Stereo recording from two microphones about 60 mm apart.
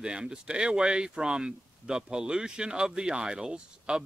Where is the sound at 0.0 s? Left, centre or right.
Centre.